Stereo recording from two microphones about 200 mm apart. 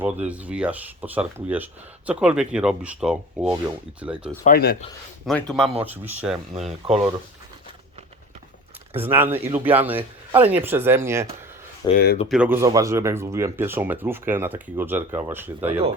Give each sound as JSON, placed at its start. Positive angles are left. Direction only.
{"t": 0.0, "sound": "speech", "side_deg": -5}
{"t": 4.4, "sound": "speech", "side_deg": 50}
{"t": 5.2, "sound": "speech", "side_deg": 0}
{"t": 6.8, "sound": "speech", "side_deg": -30}
{"t": 8.9, "sound": "speech", "side_deg": -10}
{"t": 11.8, "sound": "speech", "side_deg": 20}
{"t": 12.3, "sound": "speech", "side_deg": -10}